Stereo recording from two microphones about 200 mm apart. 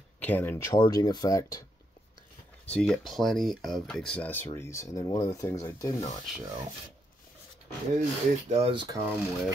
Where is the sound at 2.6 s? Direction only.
5° left (ahead or behind).